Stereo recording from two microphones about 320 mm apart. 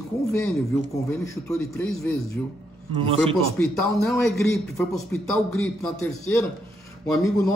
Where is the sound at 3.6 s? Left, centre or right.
Centre.